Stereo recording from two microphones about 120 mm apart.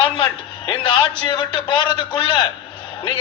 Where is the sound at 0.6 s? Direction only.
40° left (ahead or behind).